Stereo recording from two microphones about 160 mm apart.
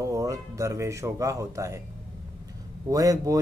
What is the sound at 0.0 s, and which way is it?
Speech, 20° right (ahead or behind).